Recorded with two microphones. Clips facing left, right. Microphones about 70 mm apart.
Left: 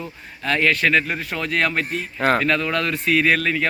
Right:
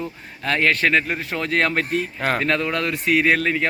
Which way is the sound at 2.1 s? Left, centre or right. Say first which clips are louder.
Left 7 dB; centre.